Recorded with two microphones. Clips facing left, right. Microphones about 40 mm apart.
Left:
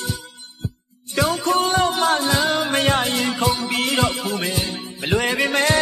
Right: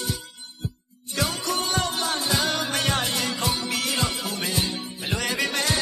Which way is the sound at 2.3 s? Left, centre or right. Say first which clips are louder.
Left 5 dB; left.